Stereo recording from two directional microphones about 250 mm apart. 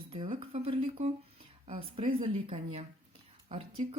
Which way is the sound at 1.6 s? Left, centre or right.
Right.